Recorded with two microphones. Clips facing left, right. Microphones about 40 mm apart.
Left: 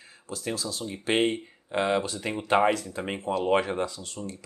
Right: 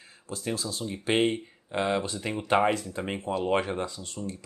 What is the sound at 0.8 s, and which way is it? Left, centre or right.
Speech, centre.